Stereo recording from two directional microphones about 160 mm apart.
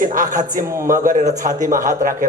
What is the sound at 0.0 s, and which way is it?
A man's voice, 55° right (ahead or behind).